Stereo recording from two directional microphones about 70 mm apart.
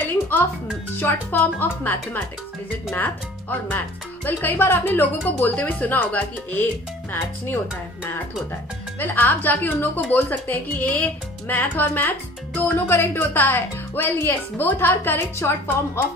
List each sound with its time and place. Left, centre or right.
0.9 s a woman's voice: left
9.0 s a woman's voice: left